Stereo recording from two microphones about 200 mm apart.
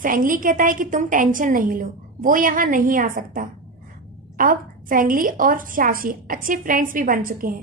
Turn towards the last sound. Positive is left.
turn(degrees=-45)  # may be behind; listen again after turning